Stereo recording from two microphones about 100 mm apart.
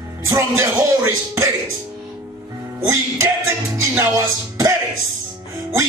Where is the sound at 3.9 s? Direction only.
25° right (ahead or behind).